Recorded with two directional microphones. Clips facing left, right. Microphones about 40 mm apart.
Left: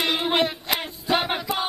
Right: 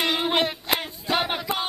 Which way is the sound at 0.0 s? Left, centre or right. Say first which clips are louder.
Left 1 dB; centre.